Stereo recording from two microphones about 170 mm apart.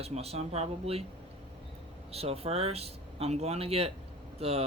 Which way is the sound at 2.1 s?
35° right (ahead or behind).